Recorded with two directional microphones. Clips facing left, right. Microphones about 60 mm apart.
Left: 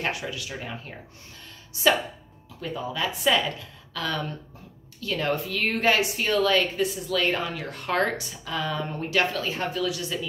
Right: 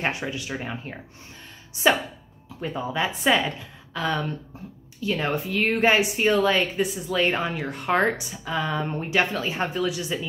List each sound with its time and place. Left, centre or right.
0.0 s a woman's voice: right